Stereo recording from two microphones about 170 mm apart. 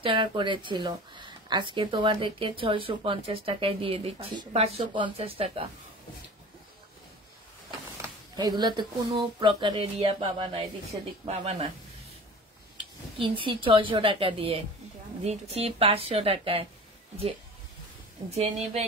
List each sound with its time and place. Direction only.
0.0 s speech: 30° right (ahead or behind)
8.4 s speech: 25° right (ahead or behind)
13.2 s a woman's voice: 30° right (ahead or behind)
18.3 s a woman's voice: 40° right (ahead or behind)